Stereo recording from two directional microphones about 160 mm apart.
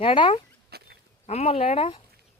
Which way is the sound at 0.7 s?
80° right.